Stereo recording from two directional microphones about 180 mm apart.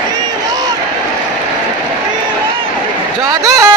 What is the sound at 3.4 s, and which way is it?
Music, 20° right (ahead or behind).